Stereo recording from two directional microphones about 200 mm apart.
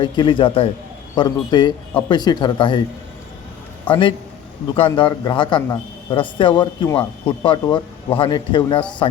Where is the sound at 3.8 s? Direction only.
25° left (ahead or behind).